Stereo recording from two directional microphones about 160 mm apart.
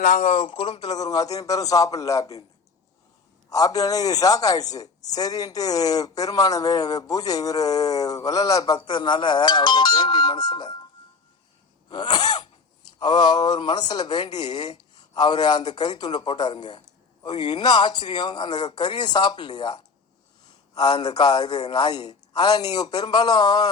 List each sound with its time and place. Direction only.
0.0 s speech: 50° left (ahead or behind)
0.8 s a woman's voice: 25° left (ahead or behind)
3.5 s a woman's voice: 20° left (ahead or behind)
11.9 s throat clearing: 25° left (ahead or behind)
12.9 s a woman's voice: 25° left (ahead or behind)